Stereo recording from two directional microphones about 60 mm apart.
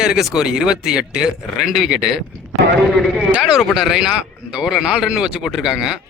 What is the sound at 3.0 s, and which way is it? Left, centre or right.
Speech, centre.